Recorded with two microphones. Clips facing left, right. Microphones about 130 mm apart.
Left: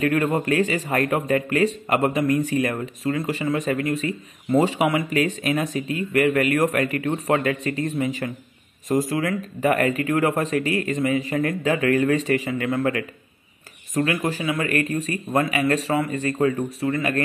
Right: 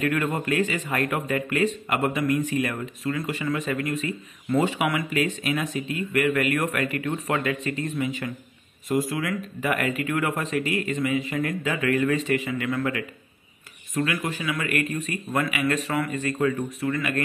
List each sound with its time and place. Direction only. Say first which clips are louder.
0.0 s speech: left 4 dB; 35° left (ahead or behind)
14.2 s speech: left 4 dB; 30° left (ahead or behind)